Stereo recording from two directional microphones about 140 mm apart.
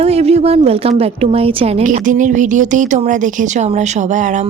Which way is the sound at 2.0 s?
65° right (ahead or behind).